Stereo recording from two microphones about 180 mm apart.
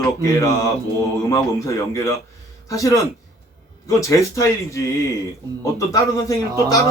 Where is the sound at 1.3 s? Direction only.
20° left (ahead or behind).